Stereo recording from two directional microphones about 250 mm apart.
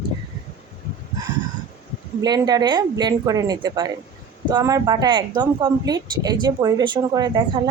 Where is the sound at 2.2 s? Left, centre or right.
Centre.